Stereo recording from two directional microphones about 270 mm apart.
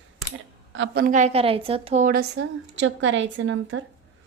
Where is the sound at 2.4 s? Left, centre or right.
Right.